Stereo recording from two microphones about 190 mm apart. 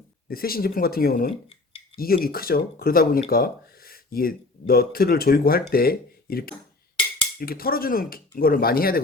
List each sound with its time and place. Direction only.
0.3 s speech: 50° left (ahead or behind)